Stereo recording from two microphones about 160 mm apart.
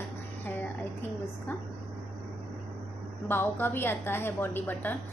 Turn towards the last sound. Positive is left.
turn(degrees=10)  # may be behind; listen again after turning